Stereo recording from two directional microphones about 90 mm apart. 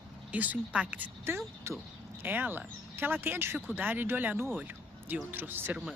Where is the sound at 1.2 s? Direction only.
25° right (ahead or behind).